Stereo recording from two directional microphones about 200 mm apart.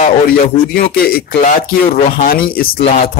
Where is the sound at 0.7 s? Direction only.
50° left (ahead or behind).